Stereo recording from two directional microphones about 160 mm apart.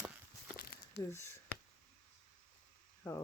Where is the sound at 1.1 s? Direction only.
15° left (ahead or behind).